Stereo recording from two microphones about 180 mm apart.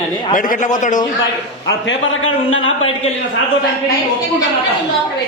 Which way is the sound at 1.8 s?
90° left.